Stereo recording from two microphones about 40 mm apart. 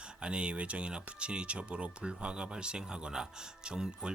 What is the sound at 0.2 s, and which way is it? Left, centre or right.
Speech, right.